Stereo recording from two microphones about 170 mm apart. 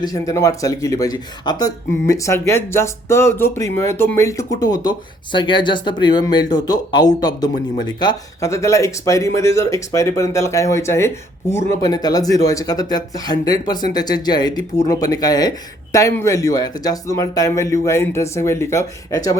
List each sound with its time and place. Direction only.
0.0 s speech: 20° left (ahead or behind)